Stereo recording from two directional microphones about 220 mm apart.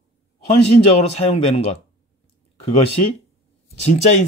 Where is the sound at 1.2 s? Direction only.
30° left (ahead or behind).